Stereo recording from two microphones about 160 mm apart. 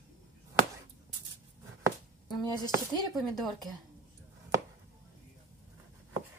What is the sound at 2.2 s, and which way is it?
Speech, 25° left (ahead or behind).